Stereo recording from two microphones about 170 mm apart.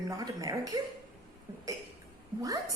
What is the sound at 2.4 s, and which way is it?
Speech, 20° right (ahead or behind).